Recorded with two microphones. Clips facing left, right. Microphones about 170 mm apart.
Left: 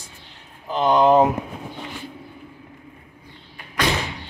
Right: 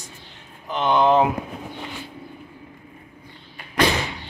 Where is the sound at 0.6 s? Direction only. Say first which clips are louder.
Left 2 dB; 35° left (ahead or behind).